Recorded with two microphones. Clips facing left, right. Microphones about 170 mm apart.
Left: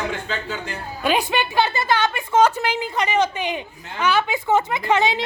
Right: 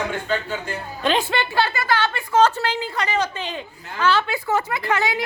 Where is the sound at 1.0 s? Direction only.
10° left (ahead or behind).